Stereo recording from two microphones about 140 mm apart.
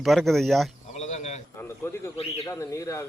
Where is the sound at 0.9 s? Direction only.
55° left (ahead or behind).